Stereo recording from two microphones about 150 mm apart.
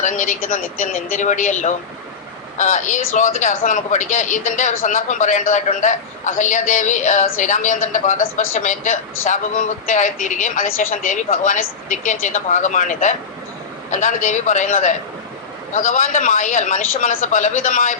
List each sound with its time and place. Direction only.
0.0 s a man's voice: 55° left (ahead or behind)